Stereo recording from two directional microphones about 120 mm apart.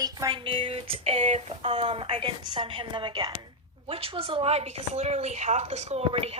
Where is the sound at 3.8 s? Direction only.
50° right (ahead or behind).